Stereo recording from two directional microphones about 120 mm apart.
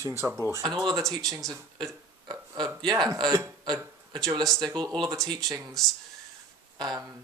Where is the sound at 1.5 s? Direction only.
30° right (ahead or behind).